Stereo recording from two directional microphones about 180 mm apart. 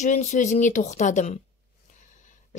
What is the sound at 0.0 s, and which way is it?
Speech, 40° left (ahead or behind).